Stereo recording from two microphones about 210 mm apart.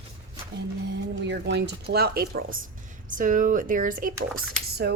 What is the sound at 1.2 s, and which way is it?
Speech, 55° right (ahead or behind).